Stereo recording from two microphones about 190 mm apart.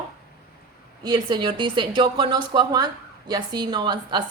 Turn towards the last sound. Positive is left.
turn(degrees=-25)  # may be behind; listen again after turning